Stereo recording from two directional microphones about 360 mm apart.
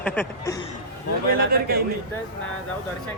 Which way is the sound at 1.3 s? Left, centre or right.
Right.